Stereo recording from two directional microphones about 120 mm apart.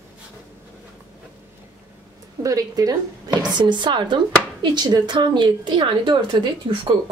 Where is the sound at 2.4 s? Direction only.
30° right (ahead or behind).